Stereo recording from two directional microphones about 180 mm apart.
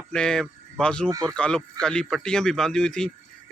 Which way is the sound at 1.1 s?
20° right (ahead or behind).